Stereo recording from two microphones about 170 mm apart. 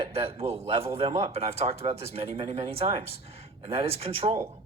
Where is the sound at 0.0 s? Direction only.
35° right (ahead or behind).